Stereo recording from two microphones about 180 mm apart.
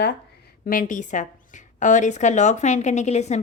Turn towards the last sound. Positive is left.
turn(degrees=40)  # may be behind; listen again after turning